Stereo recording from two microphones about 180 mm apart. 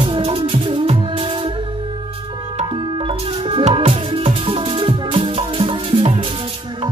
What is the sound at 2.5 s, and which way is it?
Music, 30° right (ahead or behind).